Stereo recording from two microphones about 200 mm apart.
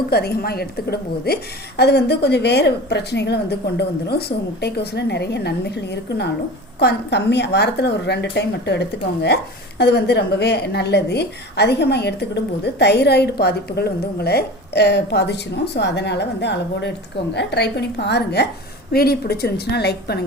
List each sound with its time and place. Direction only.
0.1 s a woman's voice: 50° left (ahead or behind)